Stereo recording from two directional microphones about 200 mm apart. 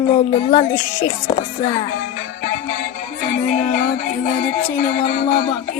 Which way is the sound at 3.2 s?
40° left (ahead or behind).